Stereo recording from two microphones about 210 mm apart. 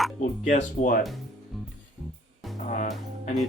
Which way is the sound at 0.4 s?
35° left (ahead or behind).